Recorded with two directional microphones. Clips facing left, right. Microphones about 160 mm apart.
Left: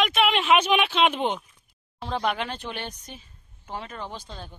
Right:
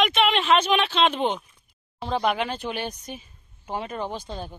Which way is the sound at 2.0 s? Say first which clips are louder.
Right 3 dB; 5° right (ahead or behind).